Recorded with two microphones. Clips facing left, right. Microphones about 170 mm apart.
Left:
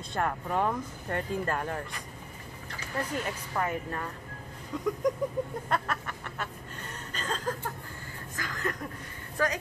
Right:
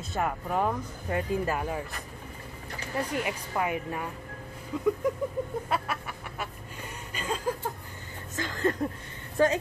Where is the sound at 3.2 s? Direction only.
10° right (ahead or behind).